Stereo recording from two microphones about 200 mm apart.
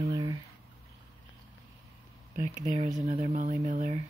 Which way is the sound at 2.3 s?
40° right (ahead or behind).